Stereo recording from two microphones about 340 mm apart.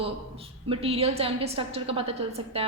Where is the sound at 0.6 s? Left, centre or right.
Centre.